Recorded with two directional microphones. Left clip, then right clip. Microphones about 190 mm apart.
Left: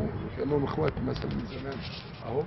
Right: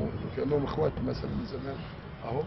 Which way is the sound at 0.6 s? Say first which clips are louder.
Even; 15° left (ahead or behind).